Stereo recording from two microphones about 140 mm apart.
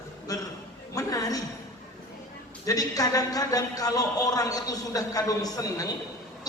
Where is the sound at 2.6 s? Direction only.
25° left (ahead or behind).